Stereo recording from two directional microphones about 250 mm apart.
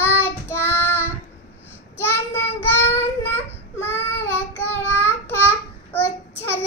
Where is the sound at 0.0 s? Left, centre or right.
Centre.